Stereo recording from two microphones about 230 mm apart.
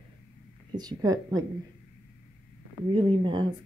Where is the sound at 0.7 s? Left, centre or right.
Centre.